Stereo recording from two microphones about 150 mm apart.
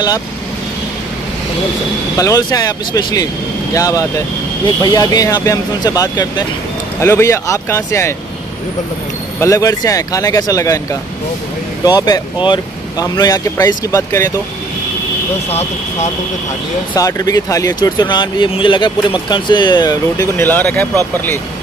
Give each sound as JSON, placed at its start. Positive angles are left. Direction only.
{"t": 2.1, "sound": "speech", "side_deg": 20}
{"t": 9.4, "sound": "speech", "side_deg": 20}
{"t": 16.9, "sound": "speech", "side_deg": 25}